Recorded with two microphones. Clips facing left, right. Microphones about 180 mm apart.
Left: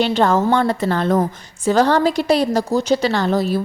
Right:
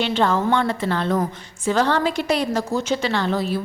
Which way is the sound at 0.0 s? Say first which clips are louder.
Left 4 dB; 40° left (ahead or behind).